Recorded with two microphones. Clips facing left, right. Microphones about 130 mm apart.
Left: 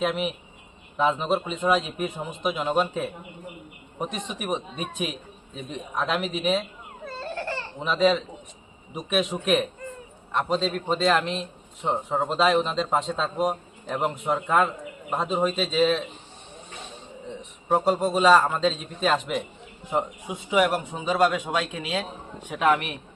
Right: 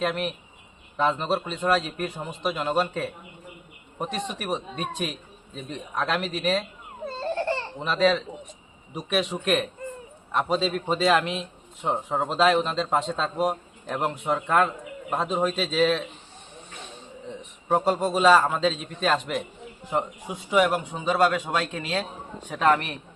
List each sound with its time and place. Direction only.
0.0 s a man's voice: 5° left (ahead or behind)
7.0 s a sound: 25° right (ahead or behind)
7.8 s a man's voice: 5° left (ahead or behind)
17.2 s a man's voice: centre (ahead or behind)